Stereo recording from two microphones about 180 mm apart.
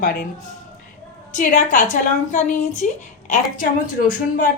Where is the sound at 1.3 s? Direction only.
45° left (ahead or behind).